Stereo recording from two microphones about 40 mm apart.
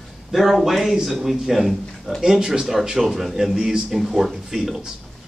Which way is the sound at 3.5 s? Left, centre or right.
Centre.